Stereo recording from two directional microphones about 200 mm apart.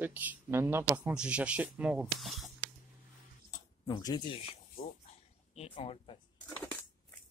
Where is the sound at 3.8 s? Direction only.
20° left (ahead or behind).